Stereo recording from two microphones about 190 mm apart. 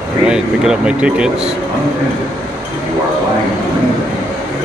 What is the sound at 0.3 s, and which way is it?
Speech, 5° right (ahead or behind).